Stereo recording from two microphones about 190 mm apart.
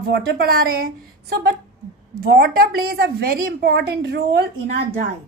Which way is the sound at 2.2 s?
55° right (ahead or behind).